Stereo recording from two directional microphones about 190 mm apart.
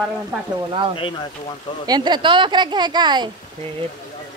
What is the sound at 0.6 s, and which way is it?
Speech, 25° right (ahead or behind).